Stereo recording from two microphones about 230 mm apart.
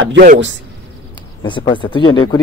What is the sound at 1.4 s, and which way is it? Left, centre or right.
Speech, left.